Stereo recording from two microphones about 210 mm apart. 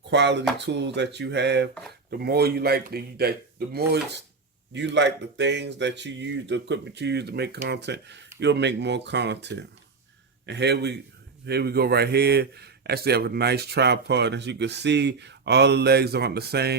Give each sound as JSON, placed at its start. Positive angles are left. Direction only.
{"t": 0.1, "sound": "a man's voice", "side_deg": -55}